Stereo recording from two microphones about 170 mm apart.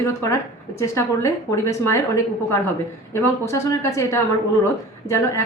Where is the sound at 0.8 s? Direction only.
15° left (ahead or behind).